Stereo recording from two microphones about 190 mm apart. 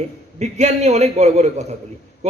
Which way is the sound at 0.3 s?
35° right (ahead or behind).